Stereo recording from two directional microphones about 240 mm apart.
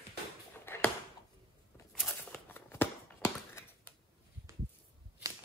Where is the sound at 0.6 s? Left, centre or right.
Centre.